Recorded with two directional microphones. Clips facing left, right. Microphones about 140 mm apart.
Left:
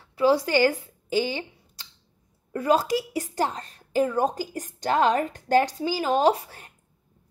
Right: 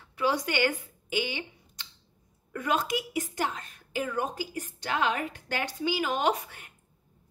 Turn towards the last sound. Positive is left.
turn(degrees=35)  # may be behind; listen again after turning